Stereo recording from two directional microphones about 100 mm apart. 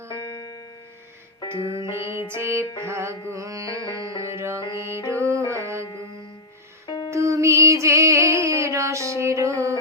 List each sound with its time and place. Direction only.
0.2 s music: 40° left (ahead or behind)
1.4 s music: 55° left (ahead or behind)
1.9 s music: 25° right (ahead or behind)
2.8 s carnatic music: 25° right (ahead or behind)
4.2 s music: 25° right (ahead or behind)
7.1 s music: 30° right (ahead or behind)